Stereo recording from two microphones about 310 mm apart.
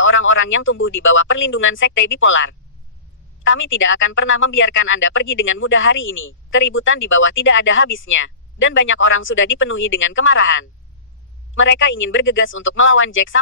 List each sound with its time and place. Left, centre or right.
0.0 s speech: left